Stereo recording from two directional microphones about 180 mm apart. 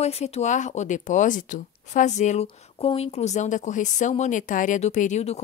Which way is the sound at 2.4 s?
30° left (ahead or behind).